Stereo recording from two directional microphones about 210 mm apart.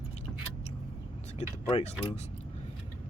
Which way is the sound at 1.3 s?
30° left (ahead or behind).